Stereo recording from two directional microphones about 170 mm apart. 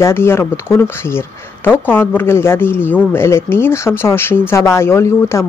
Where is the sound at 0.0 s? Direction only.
15° left (ahead or behind).